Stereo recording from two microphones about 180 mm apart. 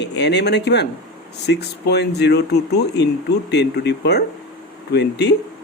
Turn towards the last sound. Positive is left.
turn(degrees=70)  # may be behind; listen again after turning